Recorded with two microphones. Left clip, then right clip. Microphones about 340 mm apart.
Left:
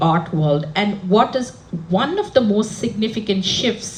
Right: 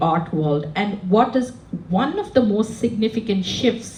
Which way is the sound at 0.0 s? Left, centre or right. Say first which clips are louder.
Left 2 dB; left.